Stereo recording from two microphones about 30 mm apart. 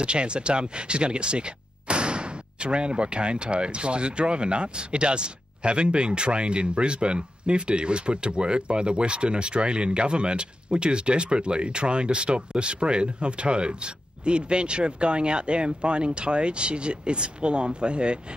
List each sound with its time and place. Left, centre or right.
0.0 s speech: right